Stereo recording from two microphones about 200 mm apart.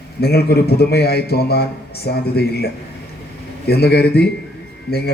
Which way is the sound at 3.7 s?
55° left (ahead or behind).